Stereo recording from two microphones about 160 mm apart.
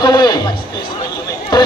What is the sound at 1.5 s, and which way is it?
Speech, 25° left (ahead or behind).